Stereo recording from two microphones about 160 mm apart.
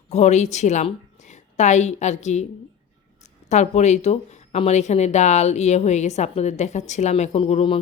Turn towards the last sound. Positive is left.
turn(degrees=35)  # may be behind; listen again after turning